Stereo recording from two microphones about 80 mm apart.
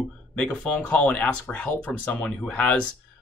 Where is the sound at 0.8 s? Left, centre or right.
Centre.